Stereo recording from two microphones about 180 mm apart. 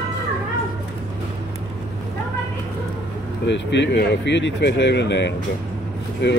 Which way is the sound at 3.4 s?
80° left.